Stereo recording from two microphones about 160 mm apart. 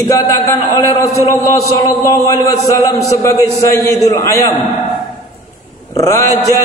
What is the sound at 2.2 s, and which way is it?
Speech, 20° left (ahead or behind).